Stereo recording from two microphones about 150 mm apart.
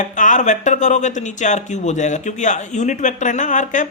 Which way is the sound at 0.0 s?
55° left (ahead or behind).